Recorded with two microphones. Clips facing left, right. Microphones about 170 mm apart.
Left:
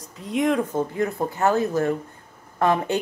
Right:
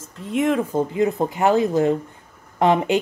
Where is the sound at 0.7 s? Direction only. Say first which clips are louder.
Right 4 dB; 15° right (ahead or behind).